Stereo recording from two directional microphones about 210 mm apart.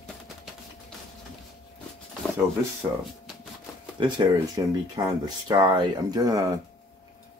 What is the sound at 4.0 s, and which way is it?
Speech, 25° right (ahead or behind).